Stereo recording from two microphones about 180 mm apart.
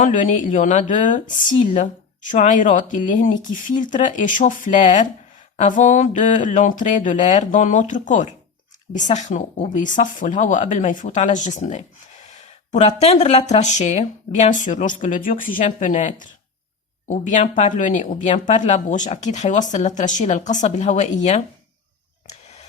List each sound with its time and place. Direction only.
0.0 s speech: 45° left (ahead or behind)